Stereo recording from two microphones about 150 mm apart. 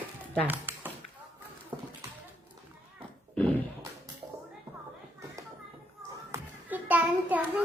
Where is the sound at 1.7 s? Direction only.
25° right (ahead or behind).